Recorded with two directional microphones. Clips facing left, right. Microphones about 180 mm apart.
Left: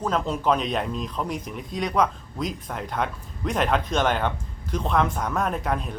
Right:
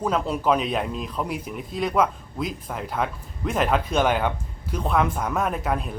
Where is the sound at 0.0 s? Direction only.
10° right (ahead or behind).